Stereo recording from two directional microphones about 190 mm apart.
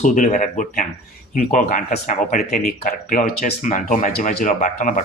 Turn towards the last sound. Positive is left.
turn(degrees=40)  # may be behind; listen again after turning